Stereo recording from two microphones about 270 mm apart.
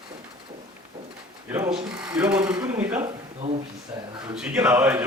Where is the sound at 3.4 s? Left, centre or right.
Right.